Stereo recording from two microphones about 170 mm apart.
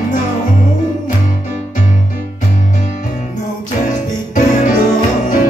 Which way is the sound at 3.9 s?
45° left (ahead or behind).